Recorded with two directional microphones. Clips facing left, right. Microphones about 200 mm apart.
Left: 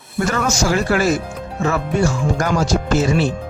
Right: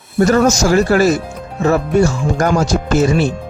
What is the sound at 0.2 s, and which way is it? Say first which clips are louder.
Speech: right 7 dB; 40° right (ahead or behind).